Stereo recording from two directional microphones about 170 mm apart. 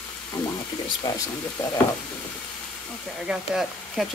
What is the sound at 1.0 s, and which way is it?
Speech, 25° left (ahead or behind).